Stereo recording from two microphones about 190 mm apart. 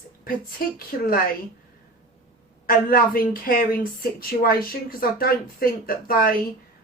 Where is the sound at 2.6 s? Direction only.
50° left (ahead or behind).